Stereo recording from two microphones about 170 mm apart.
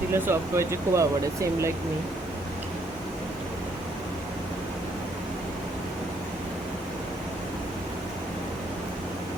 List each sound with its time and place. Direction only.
0.1 s speech: 15° right (ahead or behind)